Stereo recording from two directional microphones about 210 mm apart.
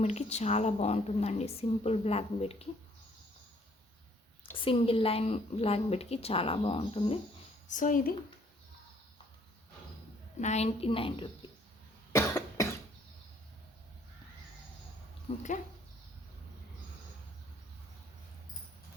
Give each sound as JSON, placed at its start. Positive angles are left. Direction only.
{"t": 0.0, "sound": "a woman's voice", "side_deg": 30}
{"t": 4.5, "sound": "a woman's voice", "side_deg": 25}
{"t": 7.7, "sound": "a woman's voice", "side_deg": 40}
{"t": 10.4, "sound": "a woman's voice", "side_deg": 30}
{"t": 12.1, "sound": "cough", "side_deg": 15}
{"t": 15.3, "sound": "a woman's voice", "side_deg": 25}